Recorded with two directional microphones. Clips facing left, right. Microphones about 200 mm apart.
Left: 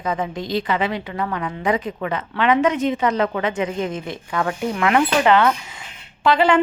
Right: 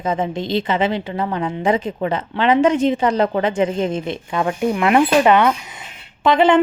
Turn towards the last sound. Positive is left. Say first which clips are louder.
# right 3 dB
turn(degrees=-20)  # may be behind; listen again after turning